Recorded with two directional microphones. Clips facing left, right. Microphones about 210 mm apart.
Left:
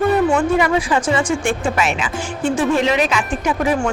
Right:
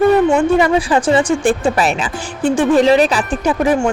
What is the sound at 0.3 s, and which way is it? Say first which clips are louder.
Speech: right 4 dB; 30° right (ahead or behind).